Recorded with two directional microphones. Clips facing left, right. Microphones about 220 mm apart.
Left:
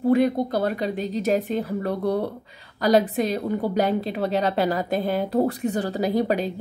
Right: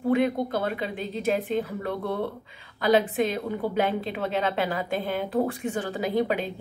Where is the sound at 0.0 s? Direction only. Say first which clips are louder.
Left 4 dB; 40° left (ahead or behind).